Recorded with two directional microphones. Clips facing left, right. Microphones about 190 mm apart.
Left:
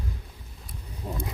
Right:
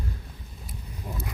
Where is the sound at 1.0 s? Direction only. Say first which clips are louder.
Left 3 dB; 25° left (ahead or behind).